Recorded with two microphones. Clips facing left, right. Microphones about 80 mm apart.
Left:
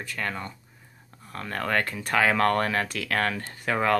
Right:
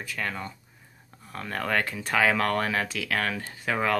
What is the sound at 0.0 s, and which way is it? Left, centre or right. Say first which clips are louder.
Speech: even; centre.